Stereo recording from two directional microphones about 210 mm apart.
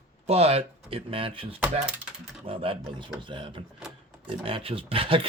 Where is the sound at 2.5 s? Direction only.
25° right (ahead or behind).